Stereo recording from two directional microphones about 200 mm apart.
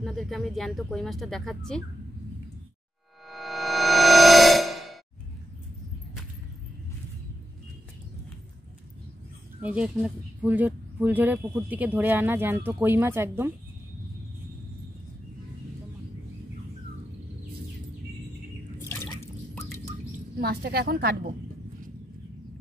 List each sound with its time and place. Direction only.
0.0 s speech: centre (ahead or behind)
3.3 s music: centre (ahead or behind)
9.6 s speech: 5° right (ahead or behind)
18.9 s drip: 15° left (ahead or behind)
20.3 s a woman's voice: 50° right (ahead or behind)